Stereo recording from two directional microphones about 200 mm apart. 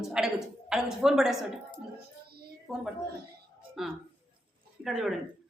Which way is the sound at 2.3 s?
50° right (ahead or behind).